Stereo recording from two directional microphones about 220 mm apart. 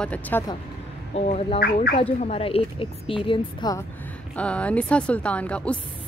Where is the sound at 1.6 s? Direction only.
40° left (ahead or behind).